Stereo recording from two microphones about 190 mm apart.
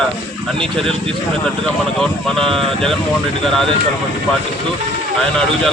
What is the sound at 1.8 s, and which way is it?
Speech, 5° left (ahead or behind).